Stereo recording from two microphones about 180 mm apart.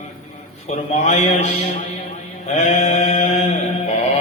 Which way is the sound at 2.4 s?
40° left (ahead or behind).